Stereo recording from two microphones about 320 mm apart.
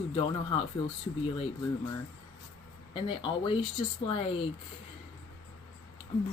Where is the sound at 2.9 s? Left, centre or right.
Centre.